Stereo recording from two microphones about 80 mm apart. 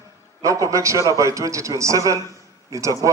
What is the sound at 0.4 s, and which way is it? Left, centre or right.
A man's voice, right.